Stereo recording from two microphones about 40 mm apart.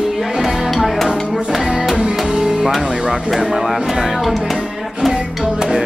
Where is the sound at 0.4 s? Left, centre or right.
Centre.